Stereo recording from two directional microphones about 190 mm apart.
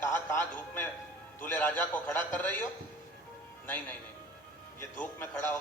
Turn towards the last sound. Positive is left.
turn(degrees=10)  # may be behind; listen again after turning